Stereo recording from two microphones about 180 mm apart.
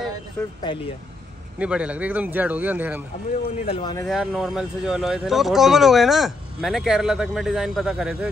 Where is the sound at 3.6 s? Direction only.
30° left (ahead or behind).